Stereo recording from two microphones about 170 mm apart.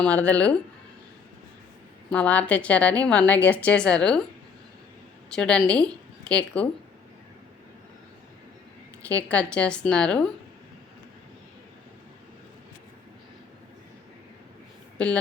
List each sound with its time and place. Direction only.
0.0 s a woman's voice: 10° left (ahead or behind)
2.0 s a woman's voice: 10° left (ahead or behind)
5.3 s a woman's voice: 5° left (ahead or behind)
9.0 s a woman's voice: 10° left (ahead or behind)
14.9 s speech: 5° left (ahead or behind)